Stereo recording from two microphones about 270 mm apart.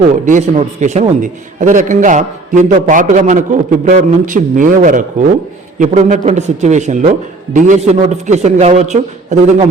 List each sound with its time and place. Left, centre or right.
0.3 s a man's voice: right